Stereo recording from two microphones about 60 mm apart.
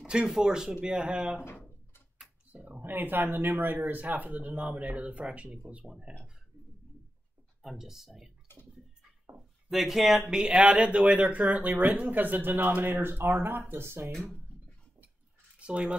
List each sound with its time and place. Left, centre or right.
0.0 s speech: centre
2.5 s speech: right
7.6 s speech: centre
9.7 s speech: centre
10.4 s speech: centre; by 14.1 s right
15.6 s speech: centre